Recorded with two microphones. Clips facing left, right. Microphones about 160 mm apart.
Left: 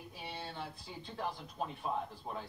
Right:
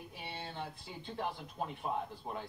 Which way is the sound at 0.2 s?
20° right (ahead or behind).